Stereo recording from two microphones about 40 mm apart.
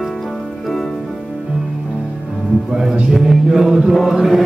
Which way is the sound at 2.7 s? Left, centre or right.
Centre.